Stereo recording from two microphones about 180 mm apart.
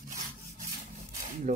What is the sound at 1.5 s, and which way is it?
Speech, 50° right (ahead or behind).